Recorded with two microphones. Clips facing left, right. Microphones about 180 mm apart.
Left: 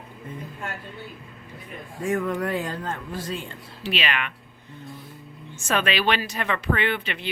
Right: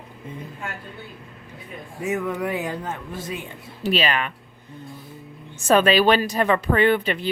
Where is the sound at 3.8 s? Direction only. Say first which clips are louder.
Right 5 dB; 40° right (ahead or behind).